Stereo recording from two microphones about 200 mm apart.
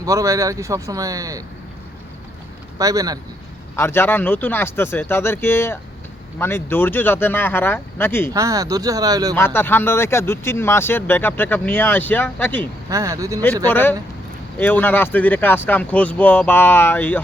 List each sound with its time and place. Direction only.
0.0 s speech: 15° right (ahead or behind)
2.7 s speech: 15° right (ahead or behind)
3.8 s speech: 10° left (ahead or behind)
8.3 s speech: 15° right (ahead or behind)
9.3 s speech: 10° left (ahead or behind)
12.9 s speech: 15° right (ahead or behind)
13.7 s speech: 10° left (ahead or behind)